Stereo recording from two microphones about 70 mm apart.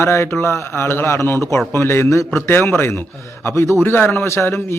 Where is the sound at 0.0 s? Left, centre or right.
Left.